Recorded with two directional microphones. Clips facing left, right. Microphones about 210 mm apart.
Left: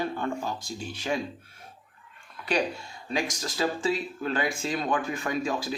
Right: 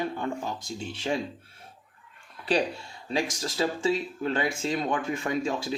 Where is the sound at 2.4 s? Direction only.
30° right (ahead or behind).